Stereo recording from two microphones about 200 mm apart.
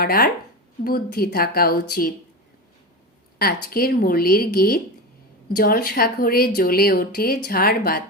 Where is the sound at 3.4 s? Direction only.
50° left (ahead or behind).